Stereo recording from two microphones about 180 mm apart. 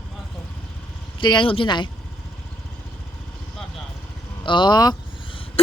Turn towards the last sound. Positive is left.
turn(degrees=30)  # may be behind; listen again after turning